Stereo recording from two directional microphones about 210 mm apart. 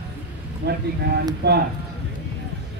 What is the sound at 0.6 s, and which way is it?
Speech, 50° right (ahead or behind).